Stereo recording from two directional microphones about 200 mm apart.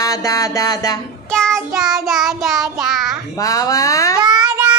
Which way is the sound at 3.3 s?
15° left (ahead or behind).